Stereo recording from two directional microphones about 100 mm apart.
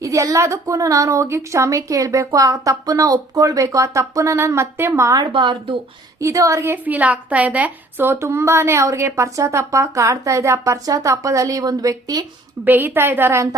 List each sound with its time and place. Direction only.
0.0 s a woman's voice: 35° right (ahead or behind)
5.1 s a woman's voice: 50° right (ahead or behind)
6.1 s a woman's voice: 35° right (ahead or behind)
6.8 s a woman's voice: 15° right (ahead or behind); by 12.2 s 35° right (ahead or behind)
12.6 s a woman's voice: 20° right (ahead or behind)